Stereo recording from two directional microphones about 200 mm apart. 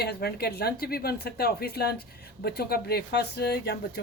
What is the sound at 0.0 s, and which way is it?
A woman's voice, 55° left (ahead or behind).